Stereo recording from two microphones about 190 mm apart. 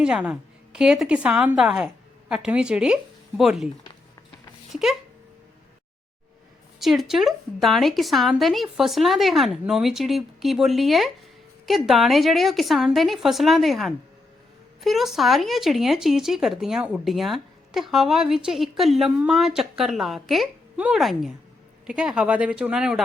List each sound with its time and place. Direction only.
0.0 s a woman's voice: 5° right (ahead or behind)
4.7 s a sound: centre (ahead or behind)
6.7 s a woman's voice: centre (ahead or behind)